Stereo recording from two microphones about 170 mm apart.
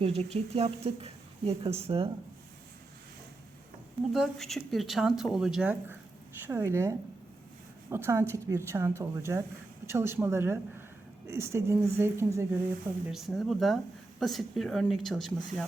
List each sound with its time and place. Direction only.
0.0 s a woman's voice: 40° right (ahead or behind)
4.1 s speech: centre (ahead or behind); by 12.5 s 15° right (ahead or behind)
13.1 s speech: centre (ahead or behind)